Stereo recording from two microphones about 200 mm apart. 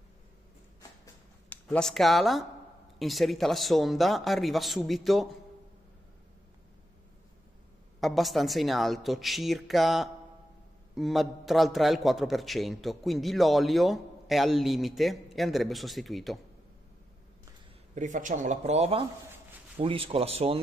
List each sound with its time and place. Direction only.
1.5 s a man's voice: 5° left (ahead or behind)
8.0 s a man's voice: centre (ahead or behind)
17.9 s speech: 40° right (ahead or behind)